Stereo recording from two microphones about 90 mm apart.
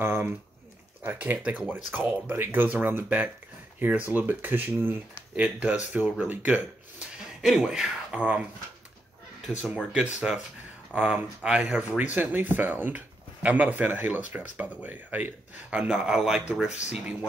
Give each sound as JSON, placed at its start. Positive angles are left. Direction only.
{"t": 0.0, "sound": "speech", "side_deg": -25}
{"t": 4.1, "sound": "speech", "side_deg": -20}
{"t": 7.4, "sound": "speech", "side_deg": -5}
{"t": 9.9, "sound": "speech", "side_deg": -10}